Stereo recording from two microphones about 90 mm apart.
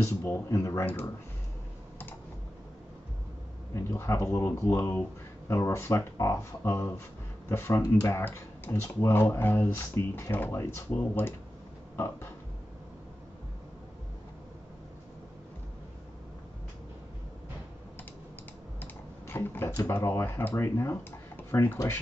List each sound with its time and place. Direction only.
0.0 s speech: 25° left (ahead or behind)
3.7 s speech: 30° left (ahead or behind)
18.8 s computer keyboard: 20° left (ahead or behind)
19.8 s speech: 30° left (ahead or behind)